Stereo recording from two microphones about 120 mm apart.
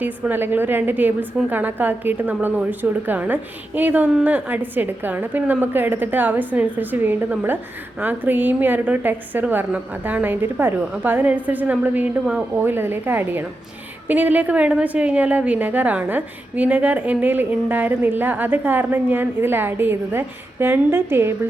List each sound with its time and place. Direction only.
0.0 s a woman's voice: 15° right (ahead or behind)